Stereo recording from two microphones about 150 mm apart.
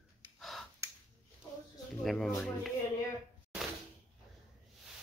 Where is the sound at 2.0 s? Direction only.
Centre (ahead or behind).